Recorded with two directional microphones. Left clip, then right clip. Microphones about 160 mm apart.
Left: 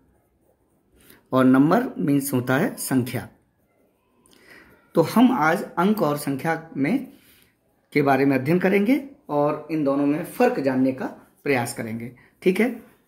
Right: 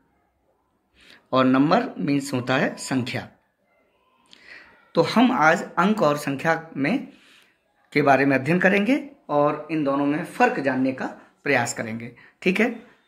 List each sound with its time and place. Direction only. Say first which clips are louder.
1.0 s speech: left 1 dB; 50° left (ahead or behind)
4.3 s a sound: right 4 dB; 55° left (ahead or behind)
5.3 s speech: right 2 dB; 30° left (ahead or behind)
7.9 s speech: right 1 dB; 25° left (ahead or behind)